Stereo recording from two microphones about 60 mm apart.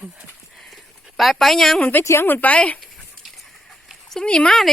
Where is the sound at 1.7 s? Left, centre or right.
Left.